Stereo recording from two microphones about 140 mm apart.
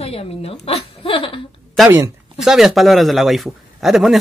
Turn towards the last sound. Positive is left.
turn(degrees=0)  # may be behind; listen again after turning